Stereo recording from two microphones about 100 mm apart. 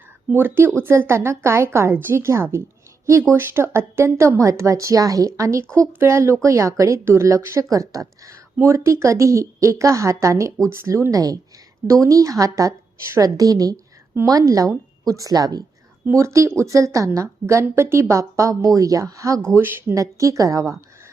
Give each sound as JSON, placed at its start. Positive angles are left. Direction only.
{"t": 0.3, "sound": "a woman's voice", "side_deg": -20}
{"t": 16.0, "sound": "a woman's voice", "side_deg": -30}